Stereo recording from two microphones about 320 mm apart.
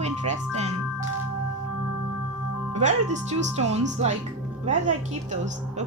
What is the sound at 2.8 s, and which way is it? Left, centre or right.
A woman's voice, right.